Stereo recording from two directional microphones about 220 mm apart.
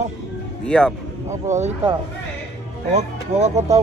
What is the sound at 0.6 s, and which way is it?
Speech, 5° left (ahead or behind).